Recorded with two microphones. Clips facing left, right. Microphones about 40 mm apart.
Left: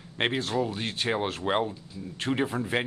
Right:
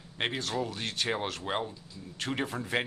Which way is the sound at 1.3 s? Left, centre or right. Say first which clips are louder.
Left 6 dB; left.